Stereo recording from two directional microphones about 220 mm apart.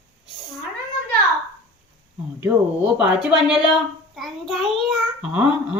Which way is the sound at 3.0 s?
5° right (ahead or behind).